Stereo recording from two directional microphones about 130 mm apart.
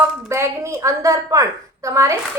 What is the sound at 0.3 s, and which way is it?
A woman's voice, 20° right (ahead or behind).